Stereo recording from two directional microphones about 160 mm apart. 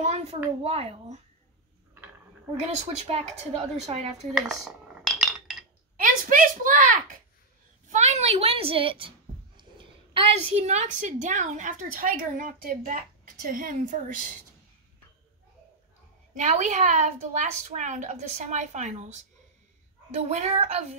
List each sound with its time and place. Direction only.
0.0 s a sound: 40° right (ahead or behind)
0.7 s a woman's voice: 40° right (ahead or behind)
2.6 s a woman's voice: 40° right (ahead or behind)
4.3 s cutlery: centre (ahead or behind)
6.0 s a sound: 55° right (ahead or behind)
7.9 s a child's voice: 45° right (ahead or behind)
16.3 s a woman's voice: 50° right (ahead or behind)